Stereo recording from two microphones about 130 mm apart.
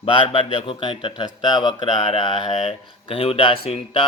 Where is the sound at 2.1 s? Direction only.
45° left (ahead or behind).